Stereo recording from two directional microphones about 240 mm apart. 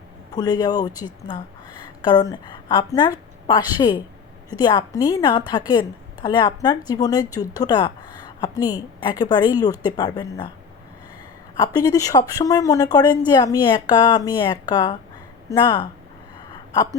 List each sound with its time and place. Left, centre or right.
0.3 s speech: centre
11.6 s speech: centre